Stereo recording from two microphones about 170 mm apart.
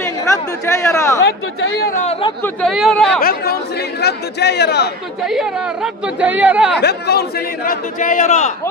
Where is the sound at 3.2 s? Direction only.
65° left (ahead or behind).